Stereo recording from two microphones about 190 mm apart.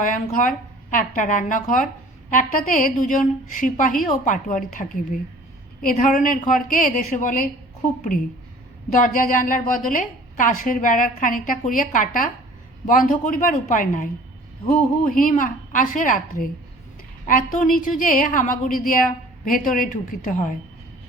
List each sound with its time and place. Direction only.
0.0 s a woman's voice: 45° left (ahead or behind)